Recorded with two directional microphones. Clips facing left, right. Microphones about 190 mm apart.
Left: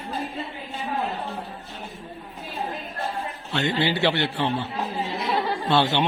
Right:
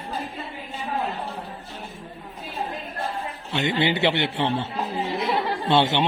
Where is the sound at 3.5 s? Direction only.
20° right (ahead or behind).